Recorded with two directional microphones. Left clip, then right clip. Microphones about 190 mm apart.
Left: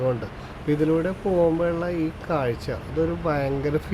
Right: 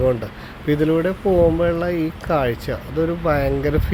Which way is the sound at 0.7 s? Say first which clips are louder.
Right 4 dB; 15° right (ahead or behind).